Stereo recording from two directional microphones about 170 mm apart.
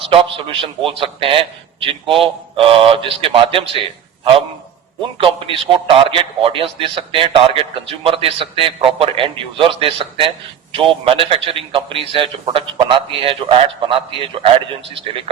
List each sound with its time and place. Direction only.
0.0 s a man's voice: 30° right (ahead or behind)
5.1 s a man's voice: 30° right (ahead or behind)